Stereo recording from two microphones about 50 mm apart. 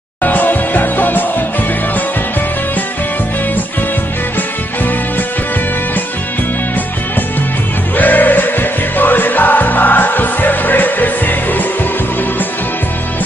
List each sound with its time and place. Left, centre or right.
0.2 s music: left
8.0 s music: left